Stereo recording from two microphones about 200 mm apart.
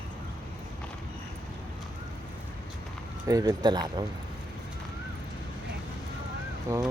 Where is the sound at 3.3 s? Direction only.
20° right (ahead or behind).